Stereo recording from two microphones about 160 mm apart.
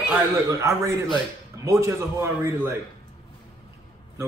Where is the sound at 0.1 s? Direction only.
20° right (ahead or behind).